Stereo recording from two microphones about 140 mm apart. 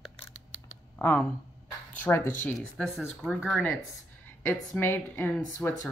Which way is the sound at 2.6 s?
Centre (ahead or behind).